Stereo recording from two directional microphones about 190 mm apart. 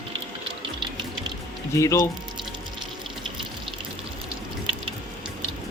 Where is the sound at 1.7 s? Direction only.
15° left (ahead or behind).